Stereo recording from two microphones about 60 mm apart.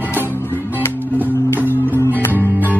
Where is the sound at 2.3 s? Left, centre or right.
Right.